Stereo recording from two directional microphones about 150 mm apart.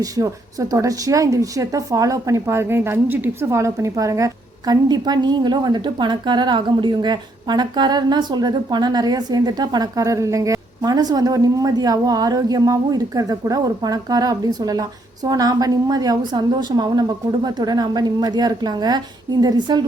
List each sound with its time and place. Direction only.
0.0 s a woman's voice: 25° right (ahead or behind)